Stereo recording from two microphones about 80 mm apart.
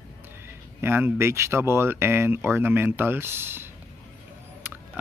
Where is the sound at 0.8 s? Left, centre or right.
Right.